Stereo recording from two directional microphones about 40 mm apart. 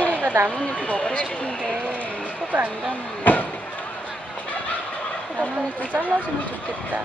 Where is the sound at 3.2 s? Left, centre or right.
Left.